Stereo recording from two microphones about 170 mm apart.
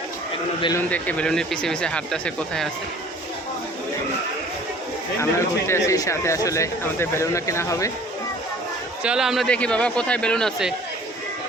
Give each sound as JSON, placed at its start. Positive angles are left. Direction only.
{"t": 0.8, "sound": "speech", "side_deg": 10}
{"t": 5.2, "sound": "speech", "side_deg": 15}
{"t": 9.0, "sound": "speech", "side_deg": -5}